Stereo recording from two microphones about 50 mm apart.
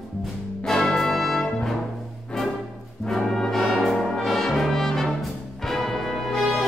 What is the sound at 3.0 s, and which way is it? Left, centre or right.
Brass instrument, centre.